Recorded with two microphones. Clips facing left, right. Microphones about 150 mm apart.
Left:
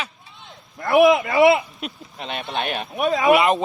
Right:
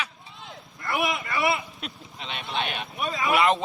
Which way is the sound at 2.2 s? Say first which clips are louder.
Left 4 dB; 50° left (ahead or behind).